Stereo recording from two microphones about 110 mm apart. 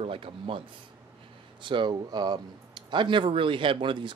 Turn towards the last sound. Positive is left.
turn(degrees=-50)  # may be behind; listen again after turning